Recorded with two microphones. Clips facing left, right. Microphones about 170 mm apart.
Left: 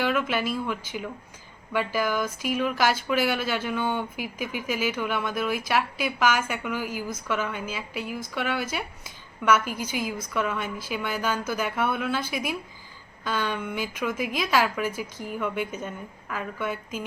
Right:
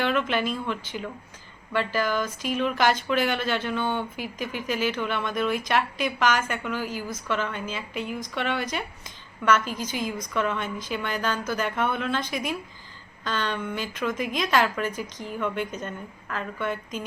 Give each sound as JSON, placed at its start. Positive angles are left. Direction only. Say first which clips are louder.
{"t": 0.0, "sound": "speech", "louder": "right 1 dB", "side_deg": 5}